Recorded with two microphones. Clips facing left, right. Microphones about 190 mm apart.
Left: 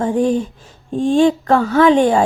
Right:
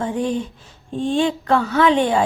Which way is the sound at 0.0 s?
45° left (ahead or behind).